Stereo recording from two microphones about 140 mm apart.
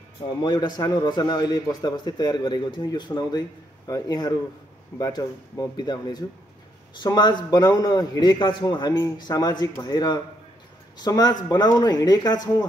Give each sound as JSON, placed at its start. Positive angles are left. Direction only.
{"t": 0.4, "sound": "a man's voice", "side_deg": 30}